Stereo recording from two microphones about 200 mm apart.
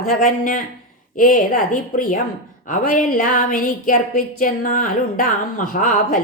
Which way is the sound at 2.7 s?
40° left (ahead or behind).